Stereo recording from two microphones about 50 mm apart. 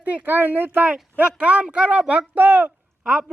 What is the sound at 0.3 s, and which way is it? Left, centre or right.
Speech, right.